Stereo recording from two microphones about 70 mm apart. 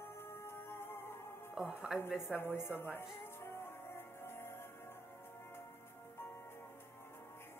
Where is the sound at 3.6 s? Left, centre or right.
Left.